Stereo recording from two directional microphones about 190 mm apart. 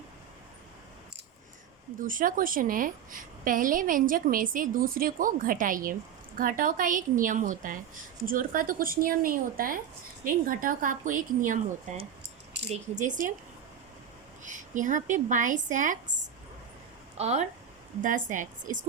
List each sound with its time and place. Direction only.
2.0 s a woman's voice: 45° right (ahead or behind)
14.4 s a woman's voice: 40° right (ahead or behind)
17.2 s a woman's voice: 35° right (ahead or behind)